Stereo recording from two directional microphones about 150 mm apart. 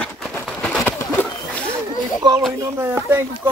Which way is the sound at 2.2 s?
30° right (ahead or behind).